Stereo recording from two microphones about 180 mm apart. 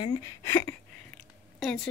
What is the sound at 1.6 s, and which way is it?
Speech, centre (ahead or behind).